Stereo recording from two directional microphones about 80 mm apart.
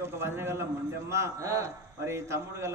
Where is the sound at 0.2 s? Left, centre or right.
Right.